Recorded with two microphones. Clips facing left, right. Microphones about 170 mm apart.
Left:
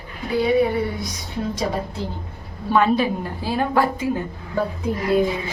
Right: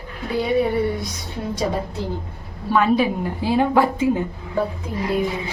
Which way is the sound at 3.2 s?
20° right (ahead or behind).